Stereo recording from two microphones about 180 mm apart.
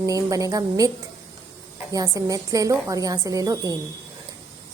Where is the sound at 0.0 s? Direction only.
20° right (ahead or behind).